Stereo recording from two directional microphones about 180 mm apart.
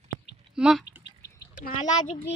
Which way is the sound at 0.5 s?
5° right (ahead or behind).